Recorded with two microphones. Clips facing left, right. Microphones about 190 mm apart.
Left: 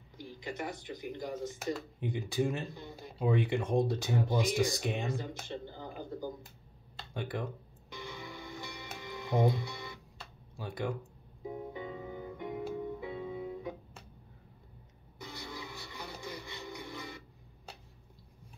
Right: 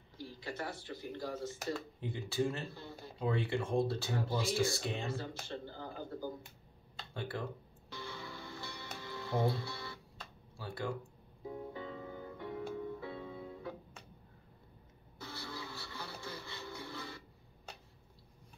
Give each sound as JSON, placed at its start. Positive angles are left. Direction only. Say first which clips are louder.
{"t": 0.2, "sound": "speech", "louder": "left 2 dB", "side_deg": 15}
{"t": 7.9, "sound": "music", "louder": "left 2 dB", "side_deg": 15}
{"t": 10.6, "sound": "speech", "louder": "left 3 dB", "side_deg": 15}
{"t": 11.4, "sound": "music", "louder": "left 3 dB", "side_deg": 15}
{"t": 15.1, "sound": "a sound", "louder": "left 1 dB", "side_deg": 15}